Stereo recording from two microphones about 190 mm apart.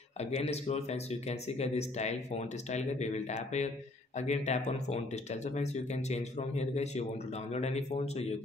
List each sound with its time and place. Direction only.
0.2 s speech: 35° left (ahead or behind)